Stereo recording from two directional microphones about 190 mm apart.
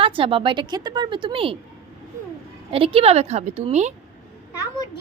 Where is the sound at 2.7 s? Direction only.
30° right (ahead or behind).